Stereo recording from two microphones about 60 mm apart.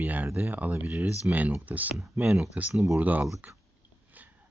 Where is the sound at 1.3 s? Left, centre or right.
Right.